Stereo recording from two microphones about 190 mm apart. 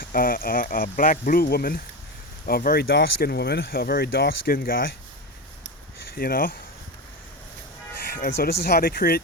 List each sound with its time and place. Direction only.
0.0 s speech: 50° left (ahead or behind)
6.1 s speech: 50° left (ahead or behind)
8.0 s speech: 50° left (ahead or behind)